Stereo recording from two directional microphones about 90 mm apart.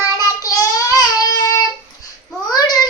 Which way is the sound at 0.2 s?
40° left (ahead or behind).